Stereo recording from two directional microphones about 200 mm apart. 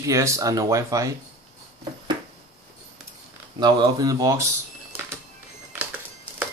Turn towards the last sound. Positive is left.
turn(degrees=-10)  # may be behind; listen again after turning